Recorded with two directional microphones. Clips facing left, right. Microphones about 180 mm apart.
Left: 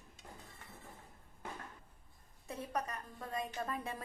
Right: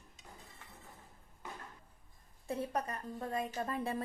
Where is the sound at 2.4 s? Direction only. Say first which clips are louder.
Right 3 dB; 30° right (ahead or behind).